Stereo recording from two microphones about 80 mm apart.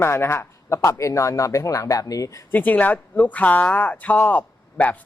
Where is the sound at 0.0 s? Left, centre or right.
Left.